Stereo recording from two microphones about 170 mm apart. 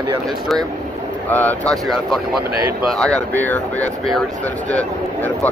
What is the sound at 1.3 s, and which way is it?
Speech, 10° left (ahead or behind).